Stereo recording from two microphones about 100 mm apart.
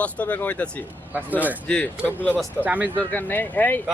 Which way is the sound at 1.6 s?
15° left (ahead or behind).